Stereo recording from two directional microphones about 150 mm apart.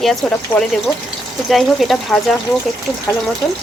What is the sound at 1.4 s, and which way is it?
Speech, centre (ahead or behind).